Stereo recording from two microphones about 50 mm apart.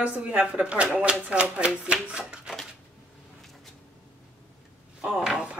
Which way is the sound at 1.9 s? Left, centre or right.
Right.